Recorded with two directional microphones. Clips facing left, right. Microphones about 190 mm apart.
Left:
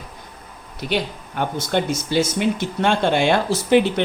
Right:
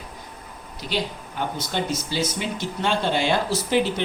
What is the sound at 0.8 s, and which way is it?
Speech, 60° left (ahead or behind).